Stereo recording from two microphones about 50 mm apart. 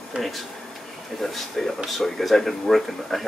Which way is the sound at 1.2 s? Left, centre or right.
Centre.